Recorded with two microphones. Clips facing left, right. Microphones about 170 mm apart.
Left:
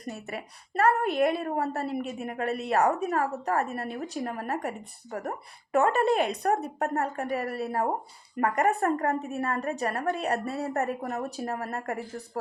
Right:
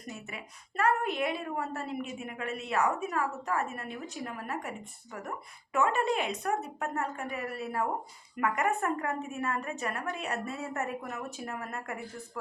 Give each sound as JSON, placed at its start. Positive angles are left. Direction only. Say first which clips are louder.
{"t": 0.1, "sound": "a woman's voice", "louder": "left 6 dB", "side_deg": 40}
{"t": 5.7, "sound": "a woman's voice", "louder": "left 5 dB", "side_deg": 35}